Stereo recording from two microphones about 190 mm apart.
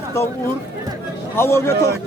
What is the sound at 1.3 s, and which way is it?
Speech, 15° left (ahead or behind).